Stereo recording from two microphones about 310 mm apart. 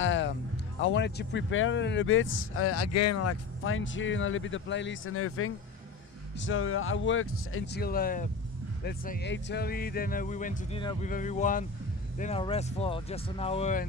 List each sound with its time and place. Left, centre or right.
0.0 s music: left
0.7 s speech: left